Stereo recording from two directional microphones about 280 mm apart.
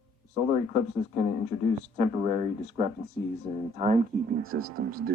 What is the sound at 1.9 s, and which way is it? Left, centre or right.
Speech, right.